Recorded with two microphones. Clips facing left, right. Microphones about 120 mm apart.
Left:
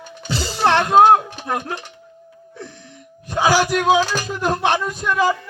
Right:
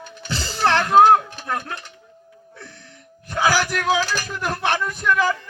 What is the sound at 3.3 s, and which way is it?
Speech, 20° left (ahead or behind).